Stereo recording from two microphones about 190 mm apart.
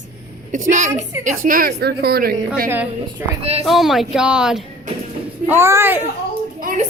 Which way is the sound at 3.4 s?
35° right (ahead or behind).